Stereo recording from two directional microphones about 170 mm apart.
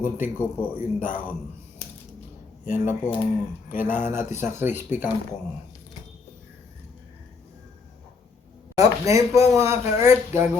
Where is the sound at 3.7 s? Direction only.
10° right (ahead or behind).